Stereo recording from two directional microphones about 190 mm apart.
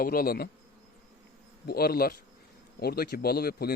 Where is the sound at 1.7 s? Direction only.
55° left (ahead or behind).